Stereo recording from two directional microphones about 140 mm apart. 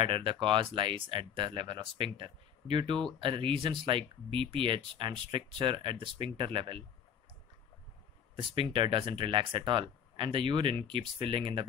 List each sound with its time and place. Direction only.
0.0 s speech: 35° right (ahead or behind)
8.4 s speech: 35° right (ahead or behind)